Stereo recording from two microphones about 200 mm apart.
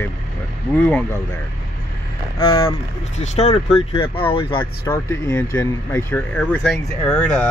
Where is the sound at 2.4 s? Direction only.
25° left (ahead or behind).